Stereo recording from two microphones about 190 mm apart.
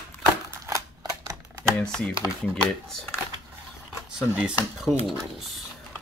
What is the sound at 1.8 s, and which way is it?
Speech, 5° left (ahead or behind).